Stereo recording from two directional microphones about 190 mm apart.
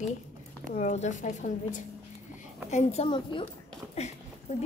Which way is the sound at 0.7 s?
40° left (ahead or behind).